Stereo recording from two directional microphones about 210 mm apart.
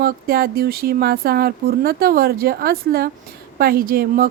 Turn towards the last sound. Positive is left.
turn(degrees=-45)  # may be behind; listen again after turning